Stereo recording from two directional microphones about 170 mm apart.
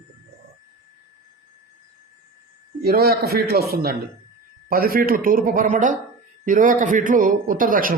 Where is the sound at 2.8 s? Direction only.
65° right (ahead or behind).